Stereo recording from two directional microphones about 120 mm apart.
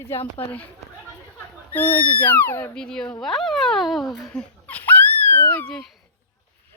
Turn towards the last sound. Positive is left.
turn(degrees=15)  # may be behind; listen again after turning